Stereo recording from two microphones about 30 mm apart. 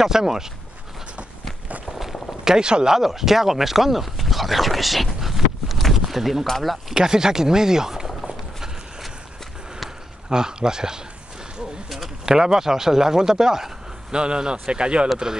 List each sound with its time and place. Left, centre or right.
0.0 s speech: centre
2.4 s speech: right
2.9 s speech: centre
5.9 s a sound: centre
6.9 s speech: right
10.3 s speech: right
12.3 s speech: centre
14.1 s speech: right
15.3 s speech: right